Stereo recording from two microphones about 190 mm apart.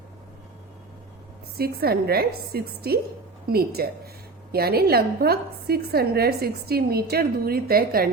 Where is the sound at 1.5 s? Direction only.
55° right (ahead or behind).